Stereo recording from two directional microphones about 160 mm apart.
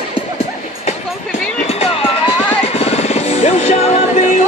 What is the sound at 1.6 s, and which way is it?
Music, 40° left (ahead or behind).